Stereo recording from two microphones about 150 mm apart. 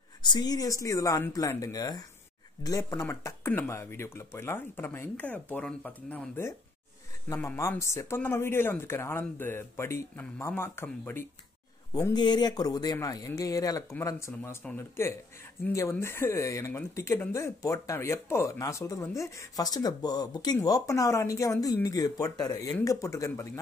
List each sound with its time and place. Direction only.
0.2 s speech: 30° left (ahead or behind)
11.9 s speech: 25° left (ahead or behind)